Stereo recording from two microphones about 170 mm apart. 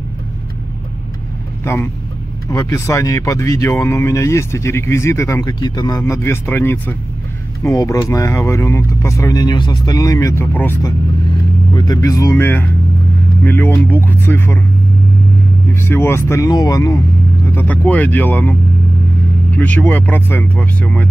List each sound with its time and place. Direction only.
1.6 s speech: 15° left (ahead or behind)
11.7 s speech: 25° left (ahead or behind)
15.7 s speech: 15° left (ahead or behind)